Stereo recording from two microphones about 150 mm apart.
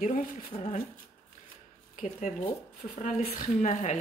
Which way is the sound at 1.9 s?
55° left (ahead or behind).